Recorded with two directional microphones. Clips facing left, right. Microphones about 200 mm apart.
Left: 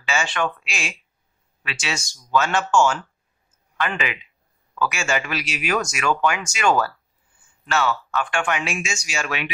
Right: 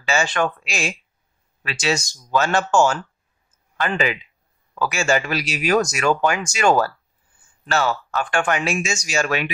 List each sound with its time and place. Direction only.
0.0 s speech: 40° right (ahead or behind)